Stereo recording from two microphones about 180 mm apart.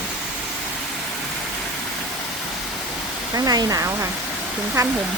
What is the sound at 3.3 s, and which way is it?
Speech, 20° right (ahead or behind).